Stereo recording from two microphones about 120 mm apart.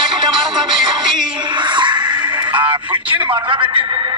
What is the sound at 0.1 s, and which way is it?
Music, 40° right (ahead or behind).